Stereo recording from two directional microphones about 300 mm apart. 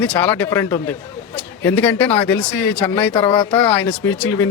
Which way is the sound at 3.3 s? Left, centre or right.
Centre.